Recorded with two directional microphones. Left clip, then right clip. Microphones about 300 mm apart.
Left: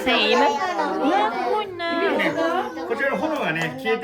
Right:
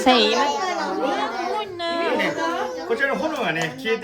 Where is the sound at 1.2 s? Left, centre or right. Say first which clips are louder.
Left 3 dB; centre.